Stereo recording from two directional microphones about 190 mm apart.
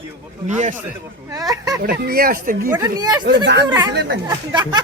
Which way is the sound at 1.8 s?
55° right (ahead or behind).